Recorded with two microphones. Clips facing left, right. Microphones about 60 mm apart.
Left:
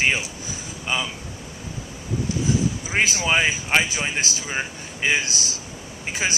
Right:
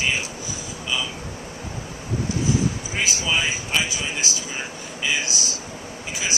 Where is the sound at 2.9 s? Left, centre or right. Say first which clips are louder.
Left 7 dB; left.